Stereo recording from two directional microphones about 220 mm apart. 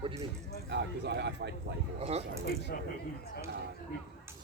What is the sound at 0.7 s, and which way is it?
A man's voice, 50° right (ahead or behind).